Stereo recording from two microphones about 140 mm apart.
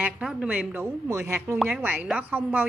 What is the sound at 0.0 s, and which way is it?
Speech, 5° right (ahead or behind).